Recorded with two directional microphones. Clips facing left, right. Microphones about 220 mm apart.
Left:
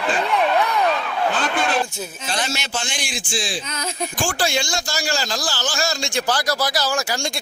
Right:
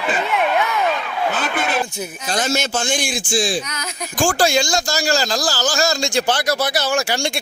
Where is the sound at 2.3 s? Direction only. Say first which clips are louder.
Right 6 dB; 45° right (ahead or behind).